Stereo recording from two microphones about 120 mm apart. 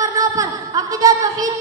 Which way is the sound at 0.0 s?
30° right (ahead or behind).